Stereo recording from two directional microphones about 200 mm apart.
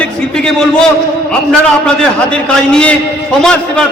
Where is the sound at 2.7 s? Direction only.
5° left (ahead or behind).